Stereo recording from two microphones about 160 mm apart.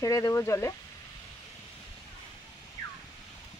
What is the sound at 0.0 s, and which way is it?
Speech, 20° left (ahead or behind).